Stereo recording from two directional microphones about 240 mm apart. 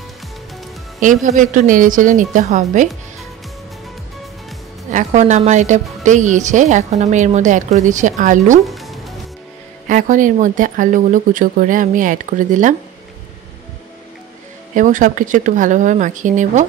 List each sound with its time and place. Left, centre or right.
1.0 s speech: right
4.9 s speech: right
8.6 s music: centre
9.8 s speech: right
14.7 s speech: right